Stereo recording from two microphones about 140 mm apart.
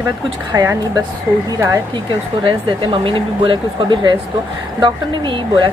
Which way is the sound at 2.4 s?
35° right (ahead or behind).